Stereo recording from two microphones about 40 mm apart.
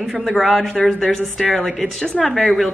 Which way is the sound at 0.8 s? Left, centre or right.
Centre.